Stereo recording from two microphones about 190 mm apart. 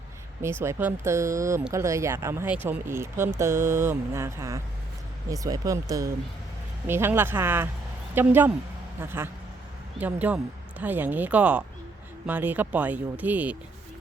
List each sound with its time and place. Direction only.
0.6 s speech: 10° right (ahead or behind)